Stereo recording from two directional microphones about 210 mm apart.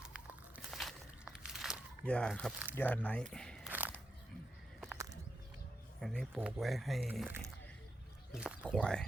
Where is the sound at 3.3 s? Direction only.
5° left (ahead or behind).